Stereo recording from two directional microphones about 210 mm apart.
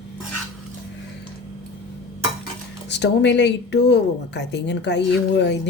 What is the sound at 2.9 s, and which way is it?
Speech, 55° left (ahead or behind).